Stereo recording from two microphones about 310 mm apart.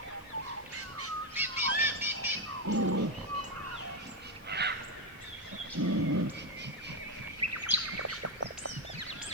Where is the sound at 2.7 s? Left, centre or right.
Right.